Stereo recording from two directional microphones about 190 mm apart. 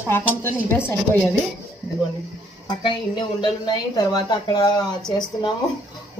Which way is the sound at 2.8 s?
25° left (ahead or behind).